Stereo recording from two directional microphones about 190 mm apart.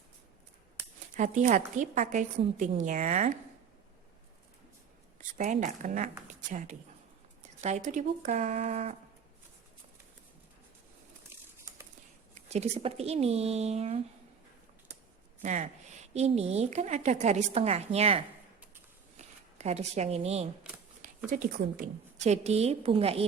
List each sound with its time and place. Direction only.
1.1 s speech: 40° right (ahead or behind)
5.1 s speech: 40° right (ahead or behind)
12.3 s speech: 35° right (ahead or behind)
15.4 s speech: 40° right (ahead or behind)
19.5 s speech: 35° right (ahead or behind)
21.2 s speech: 45° right (ahead or behind)